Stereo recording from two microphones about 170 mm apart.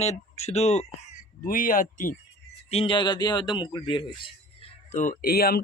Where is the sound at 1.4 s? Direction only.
55° left (ahead or behind).